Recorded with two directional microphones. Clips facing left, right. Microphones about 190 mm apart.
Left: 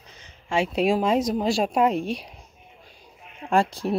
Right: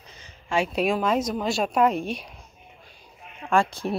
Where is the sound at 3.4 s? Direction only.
35° left (ahead or behind).